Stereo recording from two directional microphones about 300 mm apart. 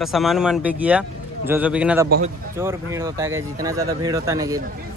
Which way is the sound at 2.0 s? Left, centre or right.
Right.